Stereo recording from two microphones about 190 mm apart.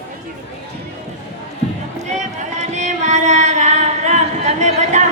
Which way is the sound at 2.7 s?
40° right (ahead or behind).